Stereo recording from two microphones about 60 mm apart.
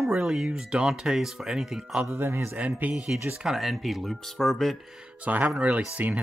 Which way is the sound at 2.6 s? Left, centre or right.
Right.